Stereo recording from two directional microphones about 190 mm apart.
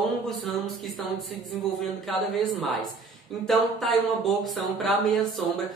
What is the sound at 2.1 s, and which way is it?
Speech, centre (ahead or behind).